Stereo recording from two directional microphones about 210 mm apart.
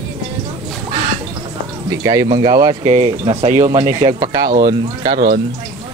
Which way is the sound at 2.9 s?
30° right (ahead or behind).